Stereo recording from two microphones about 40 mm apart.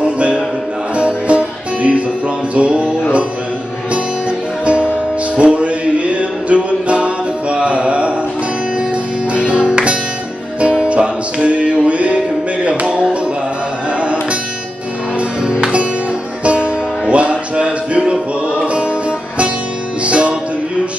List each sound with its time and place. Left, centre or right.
0.0 s music: right
4.6 s music: right
9.3 s music: right
15.1 s music: right